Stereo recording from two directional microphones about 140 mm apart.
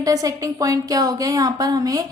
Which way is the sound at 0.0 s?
25° right (ahead or behind).